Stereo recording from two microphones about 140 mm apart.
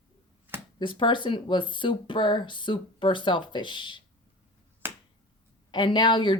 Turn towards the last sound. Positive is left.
turn(degrees=35)  # may be behind; listen again after turning